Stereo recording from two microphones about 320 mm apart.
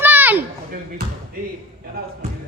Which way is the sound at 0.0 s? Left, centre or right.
Centre.